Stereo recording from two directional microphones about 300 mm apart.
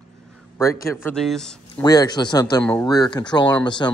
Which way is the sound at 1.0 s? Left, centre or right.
Centre.